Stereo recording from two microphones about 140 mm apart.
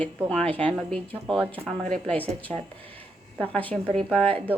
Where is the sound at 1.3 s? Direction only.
40° right (ahead or behind).